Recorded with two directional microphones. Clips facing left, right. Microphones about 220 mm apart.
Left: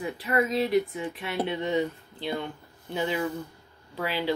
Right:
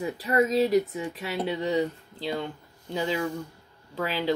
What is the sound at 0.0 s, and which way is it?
Speech, 35° right (ahead or behind).